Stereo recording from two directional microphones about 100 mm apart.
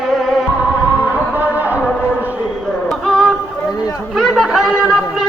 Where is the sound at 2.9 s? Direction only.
Centre (ahead or behind).